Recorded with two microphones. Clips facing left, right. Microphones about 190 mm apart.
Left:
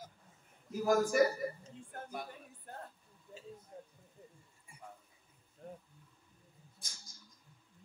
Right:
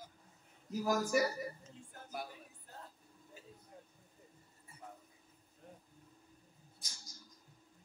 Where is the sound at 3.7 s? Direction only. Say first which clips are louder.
Left 4 dB; 30° left (ahead or behind).